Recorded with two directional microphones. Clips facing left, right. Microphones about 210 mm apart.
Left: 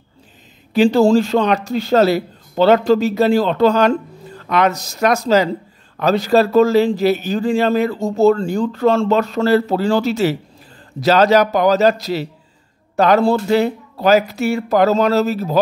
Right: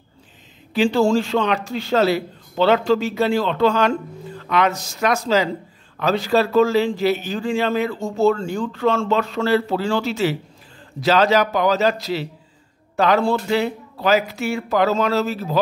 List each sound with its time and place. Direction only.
0.7 s a man's voice: 40° left (ahead or behind)